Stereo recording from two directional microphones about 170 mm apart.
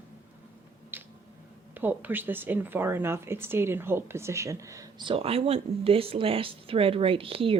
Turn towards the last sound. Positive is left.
turn(degrees=-35)  # may be behind; listen again after turning